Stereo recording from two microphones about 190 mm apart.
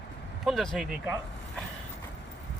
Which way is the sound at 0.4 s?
Centre (ahead or behind).